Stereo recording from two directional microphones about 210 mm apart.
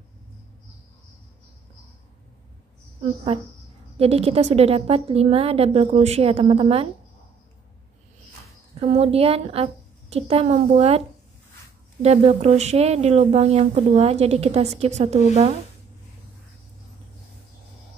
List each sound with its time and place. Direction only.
4.0 s a woman's voice: 30° right (ahead or behind)
8.7 s a woman's voice: 30° right (ahead or behind)
12.0 s speech: 30° right (ahead or behind)